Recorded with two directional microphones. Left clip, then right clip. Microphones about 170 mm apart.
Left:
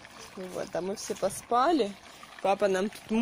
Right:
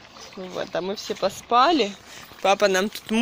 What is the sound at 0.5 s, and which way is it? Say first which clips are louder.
Speech: right 6 dB; 10° right (ahead or behind).